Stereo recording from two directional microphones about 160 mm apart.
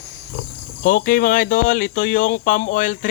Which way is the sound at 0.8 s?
60° left (ahead or behind).